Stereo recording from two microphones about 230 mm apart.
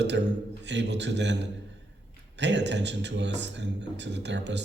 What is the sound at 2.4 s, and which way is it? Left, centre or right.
A man's voice, right.